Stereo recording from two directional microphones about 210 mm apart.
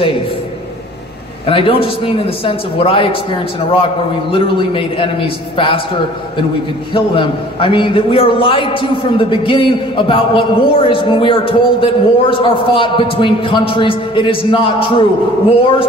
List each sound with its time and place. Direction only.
1.5 s a man's voice: 25° left (ahead or behind)
6.9 s a man's voice: 25° left (ahead or behind)